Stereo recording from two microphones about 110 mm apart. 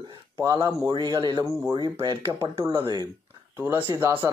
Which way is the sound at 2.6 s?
25° right (ahead or behind).